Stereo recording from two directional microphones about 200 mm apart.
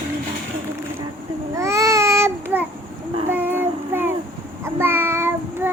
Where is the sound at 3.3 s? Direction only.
10° right (ahead or behind).